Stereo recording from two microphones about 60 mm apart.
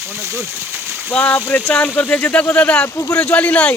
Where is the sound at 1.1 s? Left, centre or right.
Left.